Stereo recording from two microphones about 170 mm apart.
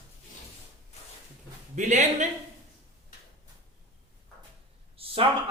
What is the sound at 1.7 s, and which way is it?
Speech, 45° right (ahead or behind).